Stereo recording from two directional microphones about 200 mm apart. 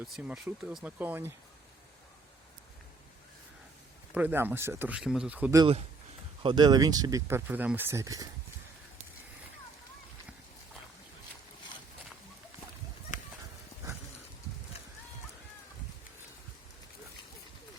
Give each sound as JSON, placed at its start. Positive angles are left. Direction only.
{"t": 0.0, "sound": "speech", "side_deg": -5}
{"t": 4.1, "sound": "speech", "side_deg": -10}
{"t": 6.4, "sound": "speech", "side_deg": -25}